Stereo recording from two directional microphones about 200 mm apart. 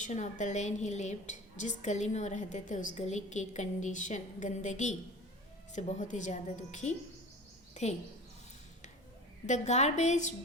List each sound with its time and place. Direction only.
0.0 s a woman's voice: 35° left (ahead or behind)
7.7 s a sound: 35° left (ahead or behind)
9.5 s a woman's voice: 35° left (ahead or behind)